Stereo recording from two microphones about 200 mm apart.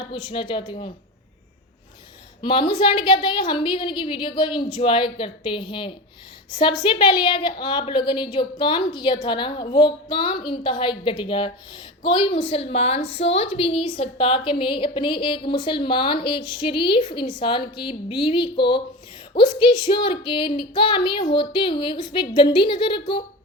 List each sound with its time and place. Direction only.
0.1 s a woman's voice: 25° left (ahead or behind)
2.4 s a woman's voice: 25° left (ahead or behind)